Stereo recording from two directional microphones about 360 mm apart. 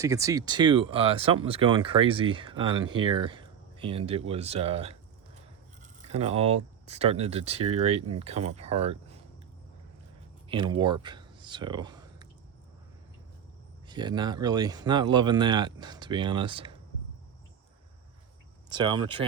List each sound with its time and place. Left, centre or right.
0.0 s speech: centre
5.8 s a sound: centre
6.8 s speech: centre
10.5 s speech: centre
13.8 s speech: centre
18.7 s speech: centre